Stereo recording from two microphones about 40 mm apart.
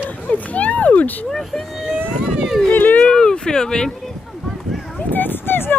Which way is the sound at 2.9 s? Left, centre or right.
Left.